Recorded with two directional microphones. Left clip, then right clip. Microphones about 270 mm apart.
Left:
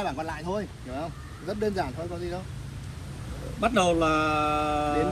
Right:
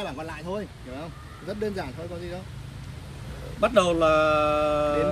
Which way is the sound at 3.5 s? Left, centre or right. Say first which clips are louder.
Right 2 dB; centre.